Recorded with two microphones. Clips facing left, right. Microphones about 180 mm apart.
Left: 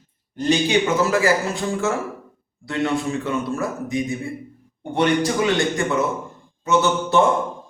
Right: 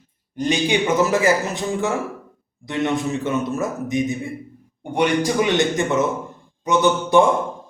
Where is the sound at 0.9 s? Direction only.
20° right (ahead or behind).